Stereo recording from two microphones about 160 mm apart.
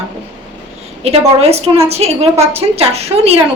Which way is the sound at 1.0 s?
40° right (ahead or behind).